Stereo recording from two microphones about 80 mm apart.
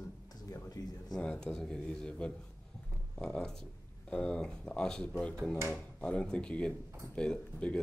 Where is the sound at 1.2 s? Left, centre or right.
Centre.